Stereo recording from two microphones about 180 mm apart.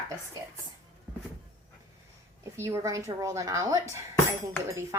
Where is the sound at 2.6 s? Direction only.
15° right (ahead or behind).